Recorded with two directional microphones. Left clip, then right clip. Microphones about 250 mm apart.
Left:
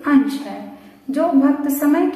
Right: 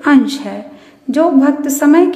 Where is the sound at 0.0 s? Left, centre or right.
Right.